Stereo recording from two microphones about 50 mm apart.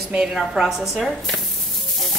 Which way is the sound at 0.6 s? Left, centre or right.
Centre.